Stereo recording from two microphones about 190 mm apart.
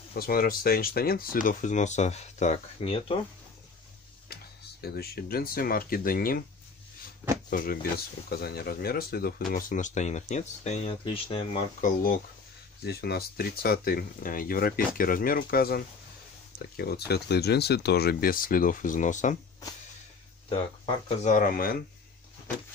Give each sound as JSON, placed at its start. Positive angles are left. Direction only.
{"t": 0.1, "sound": "speech", "side_deg": 50}
{"t": 4.8, "sound": "speech", "side_deg": 55}
{"t": 7.4, "sound": "speech", "side_deg": 45}
{"t": 12.8, "sound": "speech", "side_deg": 55}
{"t": 21.2, "sound": "speech", "side_deg": 45}